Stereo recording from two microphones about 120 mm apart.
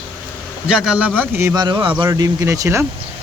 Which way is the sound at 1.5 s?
35° right (ahead or behind).